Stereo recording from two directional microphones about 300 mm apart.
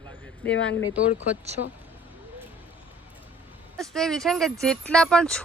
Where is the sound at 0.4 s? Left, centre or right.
Left.